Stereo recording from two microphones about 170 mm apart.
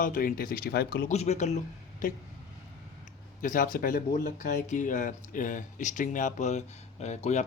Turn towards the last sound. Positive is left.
turn(degrees=45)  # may be behind; listen again after turning